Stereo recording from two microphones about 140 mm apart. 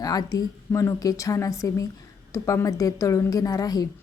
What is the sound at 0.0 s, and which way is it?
A woman's voice, 25° left (ahead or behind).